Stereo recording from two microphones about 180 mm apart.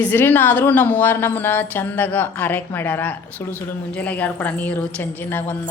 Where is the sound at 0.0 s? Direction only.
10° left (ahead or behind).